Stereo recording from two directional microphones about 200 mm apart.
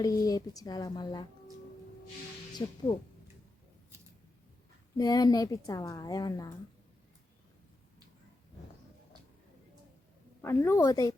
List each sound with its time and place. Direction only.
0.0 s a woman's voice: 15° left (ahead or behind)
2.5 s speech: 20° left (ahead or behind)
4.9 s a woman's voice: 20° left (ahead or behind)
10.4 s a woman's voice: 10° left (ahead or behind)